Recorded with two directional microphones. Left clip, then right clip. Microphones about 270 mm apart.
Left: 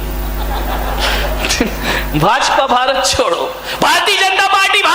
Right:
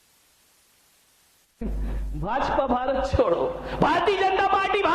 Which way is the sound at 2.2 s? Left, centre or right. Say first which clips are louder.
Left 12 dB; centre.